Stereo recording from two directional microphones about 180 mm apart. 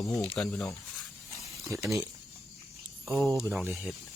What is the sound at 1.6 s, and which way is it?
Speech, 15° right (ahead or behind).